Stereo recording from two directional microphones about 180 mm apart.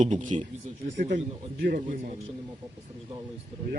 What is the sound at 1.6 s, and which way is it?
Speech, 50° right (ahead or behind).